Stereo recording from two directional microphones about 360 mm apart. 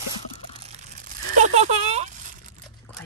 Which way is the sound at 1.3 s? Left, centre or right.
Centre.